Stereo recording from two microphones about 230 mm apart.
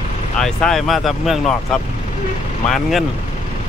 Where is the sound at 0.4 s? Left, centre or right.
Centre.